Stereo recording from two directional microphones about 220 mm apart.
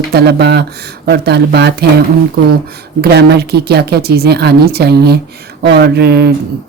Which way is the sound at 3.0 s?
50° right (ahead or behind).